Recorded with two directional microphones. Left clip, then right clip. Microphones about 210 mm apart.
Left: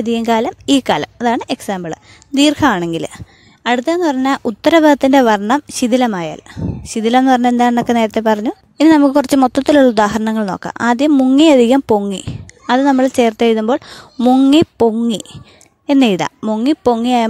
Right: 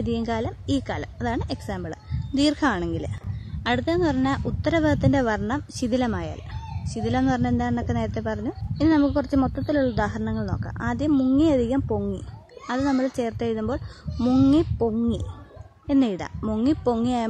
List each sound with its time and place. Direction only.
0.0 s speech: 40° left (ahead or behind)
14.5 s speech: 40° left (ahead or behind)
16.3 s speech: 30° left (ahead or behind)